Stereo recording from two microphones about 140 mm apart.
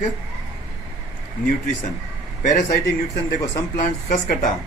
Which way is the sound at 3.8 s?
65° left (ahead or behind).